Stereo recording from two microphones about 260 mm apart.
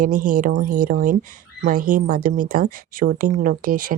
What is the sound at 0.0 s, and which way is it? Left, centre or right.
A woman's voice, right.